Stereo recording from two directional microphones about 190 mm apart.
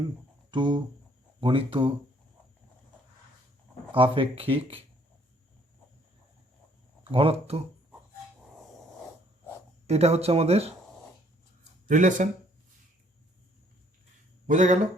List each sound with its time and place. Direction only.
0.5 s speech: 25° right (ahead or behind)
3.9 s speech: 25° right (ahead or behind)
7.1 s speech: 30° right (ahead or behind)
9.8 s speech: 35° right (ahead or behind)
11.9 s speech: 40° right (ahead or behind)
14.4 s speech: 40° right (ahead or behind)